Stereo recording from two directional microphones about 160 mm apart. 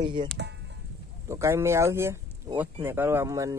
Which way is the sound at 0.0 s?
30° right (ahead or behind).